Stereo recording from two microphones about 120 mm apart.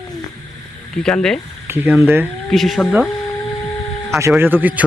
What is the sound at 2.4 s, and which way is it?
Speech, centre (ahead or behind).